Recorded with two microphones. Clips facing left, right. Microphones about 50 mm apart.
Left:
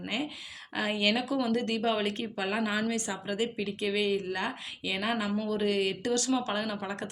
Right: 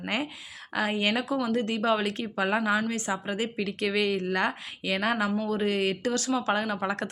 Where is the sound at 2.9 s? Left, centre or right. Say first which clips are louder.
Right 3 dB; right.